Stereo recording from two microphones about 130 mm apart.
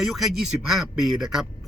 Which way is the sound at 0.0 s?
Centre (ahead or behind).